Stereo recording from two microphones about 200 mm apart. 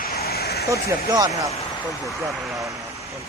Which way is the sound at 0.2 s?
50° left (ahead or behind).